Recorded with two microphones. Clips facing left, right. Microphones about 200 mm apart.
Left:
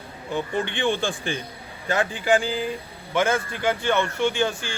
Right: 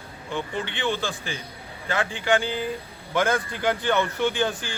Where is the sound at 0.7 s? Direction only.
50° left (ahead or behind).